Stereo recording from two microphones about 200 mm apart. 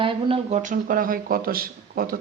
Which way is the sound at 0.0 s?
25° right (ahead or behind).